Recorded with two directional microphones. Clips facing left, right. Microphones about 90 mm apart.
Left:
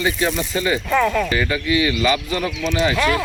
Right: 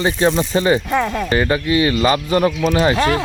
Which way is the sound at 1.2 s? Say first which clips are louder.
Right 4 dB; 35° right (ahead or behind).